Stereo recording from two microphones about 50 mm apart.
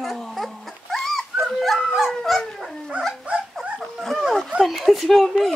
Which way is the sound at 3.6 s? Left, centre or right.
Centre.